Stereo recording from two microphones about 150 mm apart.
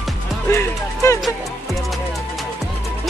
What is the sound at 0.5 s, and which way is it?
Speech, 20° left (ahead or behind).